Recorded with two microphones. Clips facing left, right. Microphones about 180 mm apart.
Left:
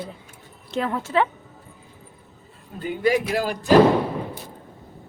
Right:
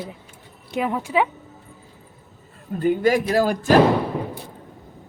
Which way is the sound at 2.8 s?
45° right (ahead or behind).